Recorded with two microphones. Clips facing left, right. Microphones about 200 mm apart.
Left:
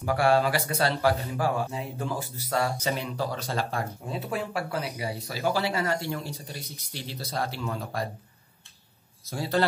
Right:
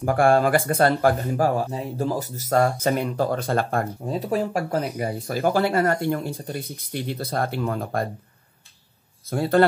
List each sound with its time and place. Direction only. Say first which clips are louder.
0.0 s speech: right 5 dB; 50° right (ahead or behind)
4.2 s speech: right 7 dB; 40° right (ahead or behind)
9.3 s speech: right 8 dB; 55° right (ahead or behind)